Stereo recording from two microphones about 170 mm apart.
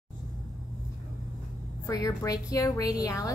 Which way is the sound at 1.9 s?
20° left (ahead or behind).